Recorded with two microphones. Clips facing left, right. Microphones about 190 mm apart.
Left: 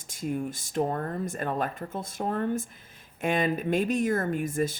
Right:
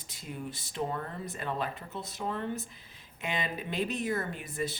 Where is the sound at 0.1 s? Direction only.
45° left (ahead or behind).